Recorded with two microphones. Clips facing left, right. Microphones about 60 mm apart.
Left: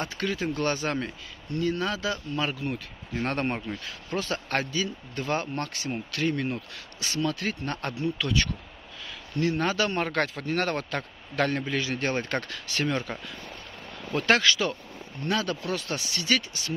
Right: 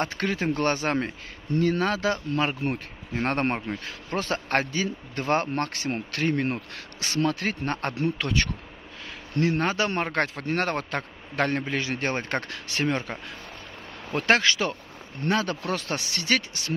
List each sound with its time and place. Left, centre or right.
0.0 s a man's voice: right